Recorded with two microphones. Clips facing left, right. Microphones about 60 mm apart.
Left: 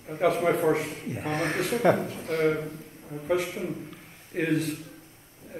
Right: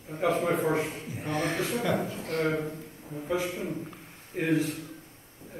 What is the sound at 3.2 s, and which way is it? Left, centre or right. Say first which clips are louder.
A man's voice: left 3 dB; left.